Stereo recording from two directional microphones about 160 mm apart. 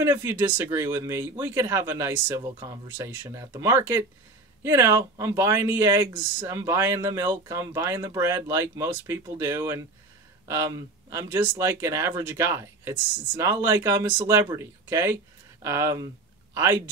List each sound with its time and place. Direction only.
0.0 s speech: 15° right (ahead or behind)